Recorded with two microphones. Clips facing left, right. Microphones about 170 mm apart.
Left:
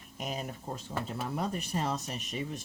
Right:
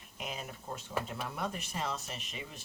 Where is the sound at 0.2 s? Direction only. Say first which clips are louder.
Left 5 dB; 40° left (ahead or behind).